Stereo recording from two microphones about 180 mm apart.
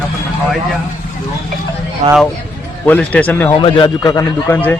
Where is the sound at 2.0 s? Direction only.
40° right (ahead or behind).